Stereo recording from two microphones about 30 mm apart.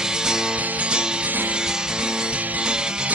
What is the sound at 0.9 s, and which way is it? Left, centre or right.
Music, right.